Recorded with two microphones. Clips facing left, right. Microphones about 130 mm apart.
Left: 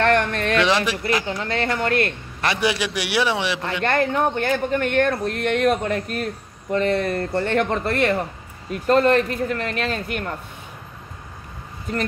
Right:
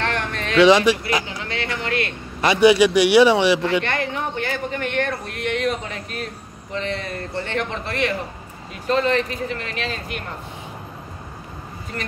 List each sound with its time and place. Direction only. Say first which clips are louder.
0.0 s a sound: left 6 dB; 55° left (ahead or behind)
0.6 s speech: right 8 dB; centre (ahead or behind)
1.4 s speech: left 4 dB; 45° left (ahead or behind)
2.4 s speech: right 8 dB; centre (ahead or behind)
3.8 s speech: left 5 dB; 45° left (ahead or behind)